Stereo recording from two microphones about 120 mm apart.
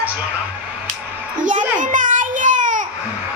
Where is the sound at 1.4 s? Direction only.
90° right.